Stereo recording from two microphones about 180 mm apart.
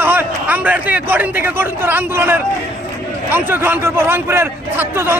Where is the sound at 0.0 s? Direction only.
10° right (ahead or behind).